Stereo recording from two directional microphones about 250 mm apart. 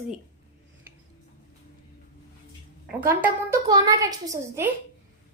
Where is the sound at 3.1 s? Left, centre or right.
Centre.